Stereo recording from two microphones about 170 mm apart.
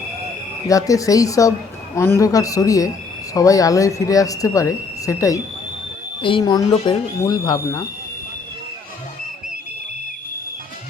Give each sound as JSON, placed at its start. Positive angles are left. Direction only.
{"t": 0.7, "sound": "speech", "side_deg": 20}